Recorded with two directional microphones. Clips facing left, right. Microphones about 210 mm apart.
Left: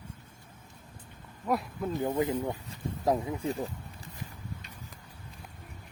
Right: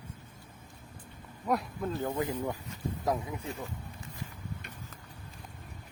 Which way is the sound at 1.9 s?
15° left (ahead or behind).